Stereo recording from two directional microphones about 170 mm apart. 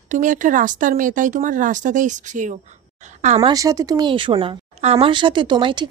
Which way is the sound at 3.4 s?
20° right (ahead or behind).